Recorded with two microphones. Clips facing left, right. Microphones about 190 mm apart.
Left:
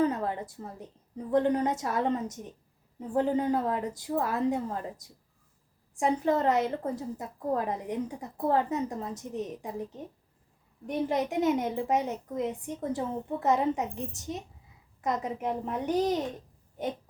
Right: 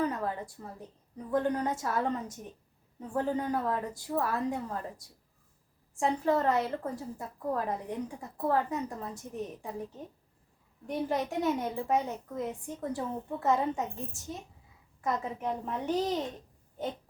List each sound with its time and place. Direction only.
0.0 s a woman's voice: 25° left (ahead or behind)
6.0 s a woman's voice: 20° left (ahead or behind)
10.8 s a woman's voice: 20° left (ahead or behind)